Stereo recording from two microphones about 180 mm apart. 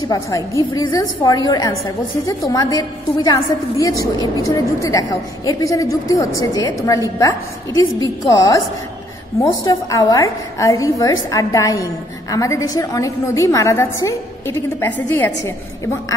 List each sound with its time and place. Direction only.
0.8 s a woman's voice: 20° left (ahead or behind)